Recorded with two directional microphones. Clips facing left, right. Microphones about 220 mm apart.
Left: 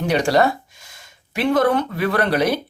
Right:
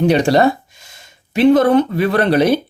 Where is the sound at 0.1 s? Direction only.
25° right (ahead or behind).